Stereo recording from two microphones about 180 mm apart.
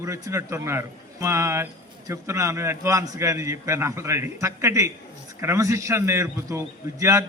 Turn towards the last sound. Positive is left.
turn(degrees=-15)  # may be behind; listen again after turning